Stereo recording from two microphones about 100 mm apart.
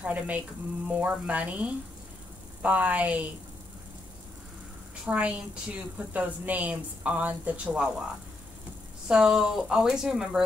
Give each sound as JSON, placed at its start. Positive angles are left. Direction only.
{"t": 0.0, "sound": "a woman's voice", "side_deg": -15}
{"t": 5.0, "sound": "a woman's voice", "side_deg": -10}
{"t": 9.0, "sound": "a woman's voice", "side_deg": -5}